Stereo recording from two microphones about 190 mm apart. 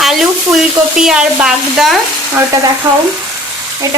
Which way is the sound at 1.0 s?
5° right (ahead or behind).